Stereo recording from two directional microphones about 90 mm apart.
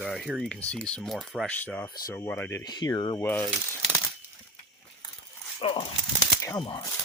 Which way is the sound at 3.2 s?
20° left (ahead or behind).